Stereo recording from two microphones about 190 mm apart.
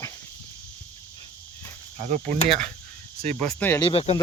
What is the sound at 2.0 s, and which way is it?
Cricket, 40° right (ahead or behind).